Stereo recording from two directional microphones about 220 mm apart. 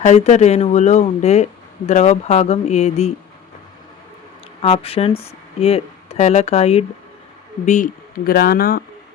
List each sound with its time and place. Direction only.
0.0 s speech: 30° left (ahead or behind)
4.6 s speech: 25° left (ahead or behind)